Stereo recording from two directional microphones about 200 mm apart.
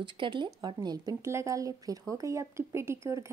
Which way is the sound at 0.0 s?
25° right (ahead or behind).